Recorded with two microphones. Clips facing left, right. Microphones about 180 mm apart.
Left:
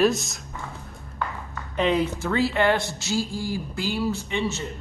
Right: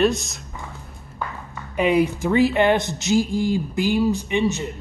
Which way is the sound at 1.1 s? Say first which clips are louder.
Even; 10° right (ahead or behind).